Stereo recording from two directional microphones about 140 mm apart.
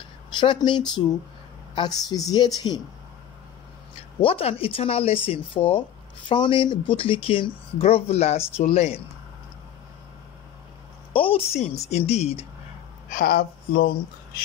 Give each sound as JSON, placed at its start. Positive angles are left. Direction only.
{"t": 0.4, "sound": "a woman's voice", "side_deg": 35}
{"t": 4.2, "sound": "speech", "side_deg": 45}
{"t": 11.1, "sound": "a woman's voice", "side_deg": 40}
{"t": 13.1, "sound": "speech", "side_deg": 90}